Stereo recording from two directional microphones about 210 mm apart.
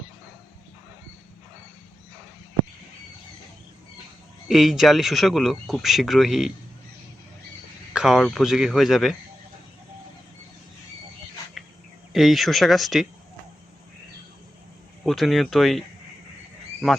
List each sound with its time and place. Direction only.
4.4 s speech: centre (ahead or behind)
7.9 s speech: centre (ahead or behind)
12.1 s speech: centre (ahead or behind)
15.0 s speech: centre (ahead or behind)